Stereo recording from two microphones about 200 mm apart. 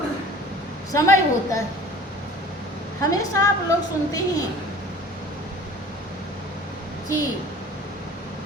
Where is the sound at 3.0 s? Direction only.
15° left (ahead or behind).